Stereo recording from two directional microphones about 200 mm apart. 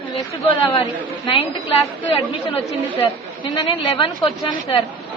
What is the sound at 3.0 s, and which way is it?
A woman's voice, 25° left (ahead or behind).